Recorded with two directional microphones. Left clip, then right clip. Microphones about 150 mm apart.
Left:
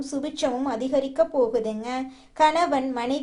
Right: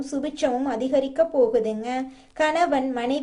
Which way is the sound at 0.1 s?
10° right (ahead or behind).